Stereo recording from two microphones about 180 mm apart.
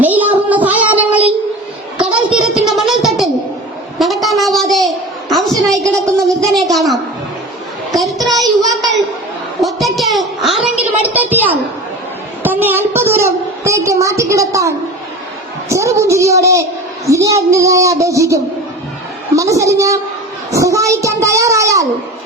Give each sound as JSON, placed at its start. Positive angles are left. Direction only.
{"t": 0.0, "sound": "child singing", "side_deg": -10}
{"t": 2.3, "sound": "music", "side_deg": 0}
{"t": 3.9, "sound": "a sound", "side_deg": 0}
{"t": 7.9, "sound": "child singing", "side_deg": 0}
{"t": 9.6, "sound": "a sound", "side_deg": 0}
{"t": 15.7, "sound": "a child's voice", "side_deg": -15}
{"t": 19.4, "sound": "a child's voice", "side_deg": -15}